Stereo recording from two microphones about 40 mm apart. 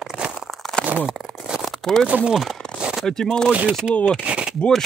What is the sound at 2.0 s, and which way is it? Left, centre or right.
Speech, right.